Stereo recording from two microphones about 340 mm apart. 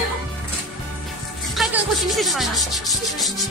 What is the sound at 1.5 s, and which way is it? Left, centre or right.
Sanding, centre.